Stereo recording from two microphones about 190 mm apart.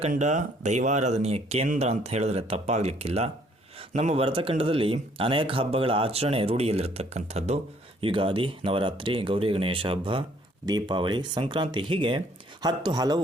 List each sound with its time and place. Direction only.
0.1 s speech: 40° right (ahead or behind); by 13.2 s 20° right (ahead or behind)